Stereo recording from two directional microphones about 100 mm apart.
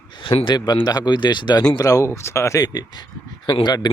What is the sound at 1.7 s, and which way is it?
Speech, 35° left (ahead or behind).